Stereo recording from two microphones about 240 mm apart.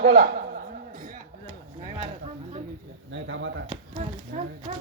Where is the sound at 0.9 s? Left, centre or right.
Right.